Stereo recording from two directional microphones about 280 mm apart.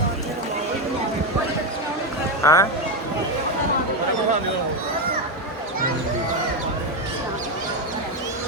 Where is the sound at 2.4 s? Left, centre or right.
Centre.